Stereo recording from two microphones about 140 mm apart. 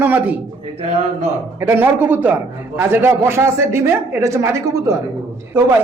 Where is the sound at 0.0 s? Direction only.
10° right (ahead or behind).